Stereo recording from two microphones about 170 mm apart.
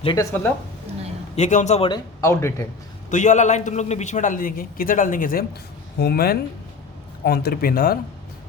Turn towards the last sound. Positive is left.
turn(degrees=60)  # may be behind; listen again after turning